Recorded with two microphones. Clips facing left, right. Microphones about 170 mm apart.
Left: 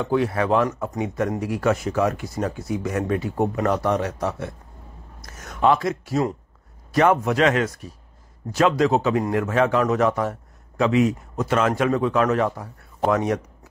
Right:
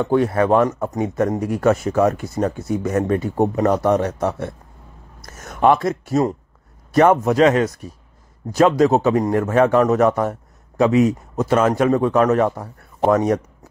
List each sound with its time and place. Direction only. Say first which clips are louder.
0.0 s a man's voice: right 5 dB; 45° right (ahead or behind)